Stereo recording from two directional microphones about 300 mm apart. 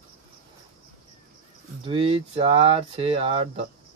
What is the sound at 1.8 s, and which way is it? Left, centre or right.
Speech, centre.